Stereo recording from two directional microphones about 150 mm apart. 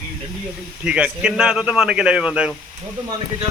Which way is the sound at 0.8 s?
5° right (ahead or behind).